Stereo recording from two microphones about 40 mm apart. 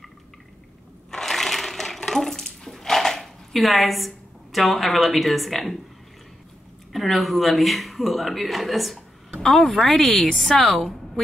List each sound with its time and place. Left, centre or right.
1.1 s crushing: centre
2.0 s a sound: centre
6.9 s a man's voice: centre
9.3 s a woman's voice: centre